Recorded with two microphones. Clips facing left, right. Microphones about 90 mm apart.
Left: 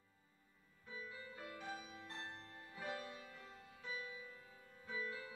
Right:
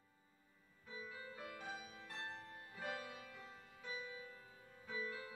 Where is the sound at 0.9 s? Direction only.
20° right (ahead or behind).